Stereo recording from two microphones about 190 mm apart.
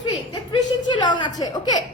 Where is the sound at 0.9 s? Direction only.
25° left (ahead or behind).